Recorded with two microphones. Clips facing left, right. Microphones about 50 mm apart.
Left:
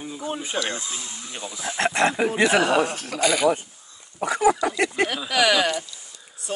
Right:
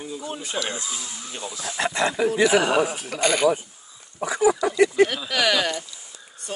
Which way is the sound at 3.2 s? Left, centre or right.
Right.